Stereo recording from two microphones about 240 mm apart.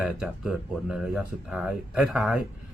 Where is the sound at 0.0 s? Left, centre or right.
Centre.